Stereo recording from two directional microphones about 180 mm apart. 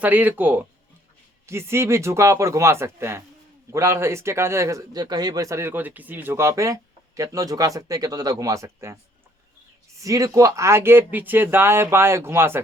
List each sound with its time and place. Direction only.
0.0 s speech: 10° right (ahead or behind)
10.0 s speech: 20° right (ahead or behind)